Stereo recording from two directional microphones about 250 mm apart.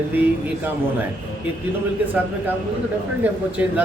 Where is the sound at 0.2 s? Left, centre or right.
Centre.